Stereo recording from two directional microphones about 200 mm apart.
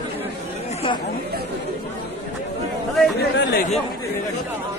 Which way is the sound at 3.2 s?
50° left (ahead or behind).